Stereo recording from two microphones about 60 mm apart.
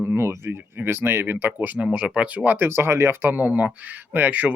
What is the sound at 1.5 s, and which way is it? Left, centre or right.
Speech, right.